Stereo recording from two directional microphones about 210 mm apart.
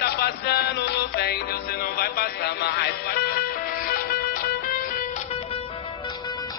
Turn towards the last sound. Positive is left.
turn(degrees=45)  # may be behind; listen again after turning